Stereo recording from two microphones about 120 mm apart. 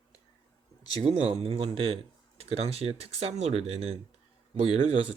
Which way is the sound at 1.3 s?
55° right (ahead or behind).